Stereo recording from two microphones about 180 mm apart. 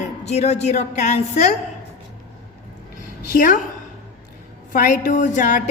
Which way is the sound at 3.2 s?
50° left (ahead or behind).